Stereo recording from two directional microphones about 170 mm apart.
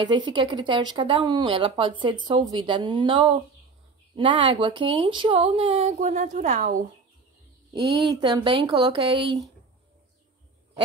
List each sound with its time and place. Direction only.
0.0 s speech: 25° right (ahead or behind); by 6.8 s 50° right (ahead or behind)
8.1 s speech: 25° right (ahead or behind)